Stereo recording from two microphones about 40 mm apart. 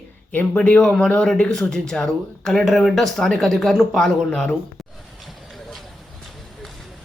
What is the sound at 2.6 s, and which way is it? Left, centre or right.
Speech, centre.